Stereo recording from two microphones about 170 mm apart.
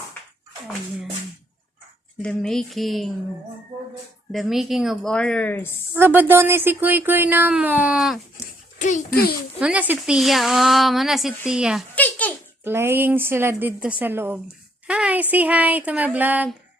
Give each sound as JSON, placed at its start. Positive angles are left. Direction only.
{"t": 2.2, "sound": "speech", "side_deg": 5}
{"t": 4.3, "sound": "speech", "side_deg": 0}
{"t": 5.9, "sound": "speech", "side_deg": -10}
{"t": 8.8, "sound": "a child's voice", "side_deg": 45}
{"t": 9.6, "sound": "speech", "side_deg": -5}
{"t": 11.9, "sound": "a sound", "side_deg": 10}
{"t": 12.6, "sound": "speech", "side_deg": -15}